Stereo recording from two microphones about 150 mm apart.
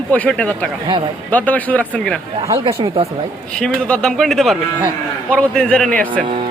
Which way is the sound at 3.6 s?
5° left (ahead or behind).